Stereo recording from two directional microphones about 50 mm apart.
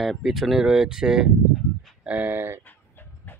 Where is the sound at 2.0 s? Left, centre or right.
Right.